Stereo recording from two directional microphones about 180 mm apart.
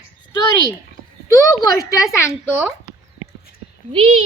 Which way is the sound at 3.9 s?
30° right (ahead or behind).